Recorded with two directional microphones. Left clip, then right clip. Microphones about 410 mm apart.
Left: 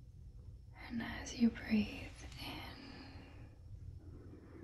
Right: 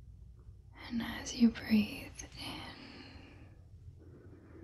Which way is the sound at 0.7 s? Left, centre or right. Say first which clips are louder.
Right 4 dB; centre.